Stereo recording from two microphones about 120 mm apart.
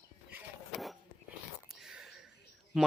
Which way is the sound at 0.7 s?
Centre (ahead or behind).